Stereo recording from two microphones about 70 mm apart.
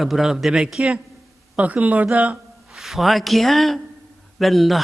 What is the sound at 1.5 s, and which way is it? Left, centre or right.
Speech, right.